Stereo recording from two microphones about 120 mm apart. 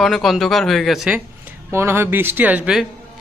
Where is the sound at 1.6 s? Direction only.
20° right (ahead or behind).